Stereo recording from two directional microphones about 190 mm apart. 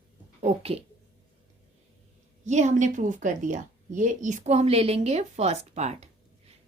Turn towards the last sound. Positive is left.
turn(degrees=-35)  # may be behind; listen again after turning